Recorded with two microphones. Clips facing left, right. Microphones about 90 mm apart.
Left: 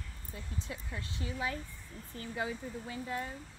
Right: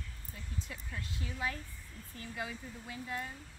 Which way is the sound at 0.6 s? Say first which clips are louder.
Left 2 dB; 25° left (ahead or behind).